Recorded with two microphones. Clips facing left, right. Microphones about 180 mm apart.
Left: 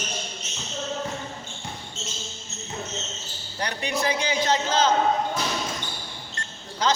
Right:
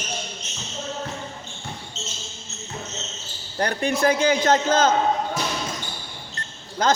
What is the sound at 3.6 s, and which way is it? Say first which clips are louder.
A man's voice: right 6 dB; 50° right (ahead or behind).